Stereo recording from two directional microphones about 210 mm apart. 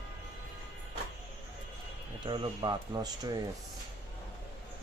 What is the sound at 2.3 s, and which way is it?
Speech, 20° right (ahead or behind).